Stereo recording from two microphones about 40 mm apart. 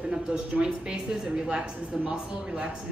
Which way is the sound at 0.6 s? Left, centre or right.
Right.